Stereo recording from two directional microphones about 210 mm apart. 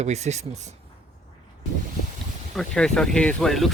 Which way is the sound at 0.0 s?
30° right (ahead or behind).